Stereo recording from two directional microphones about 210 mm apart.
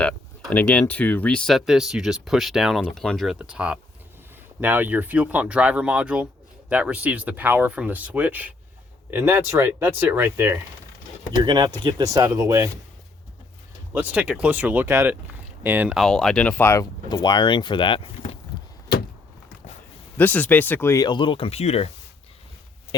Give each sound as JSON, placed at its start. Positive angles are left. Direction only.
{"t": 0.0, "sound": "speech", "side_deg": 5}
{"t": 13.9, "sound": "speech", "side_deg": -5}
{"t": 20.1, "sound": "speech", "side_deg": 10}